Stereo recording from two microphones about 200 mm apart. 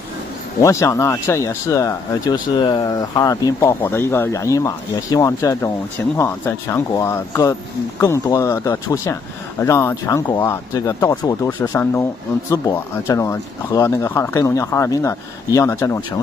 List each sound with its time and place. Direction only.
0.6 s speech: 15° left (ahead or behind)